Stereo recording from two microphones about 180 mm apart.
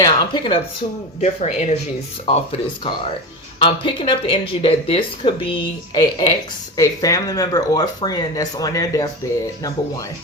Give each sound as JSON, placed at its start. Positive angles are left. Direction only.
{"t": 0.0, "sound": "speech", "side_deg": 25}
{"t": 1.2, "sound": "speech", "side_deg": 40}